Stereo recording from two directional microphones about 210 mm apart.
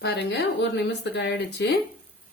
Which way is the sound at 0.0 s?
55° left (ahead or behind).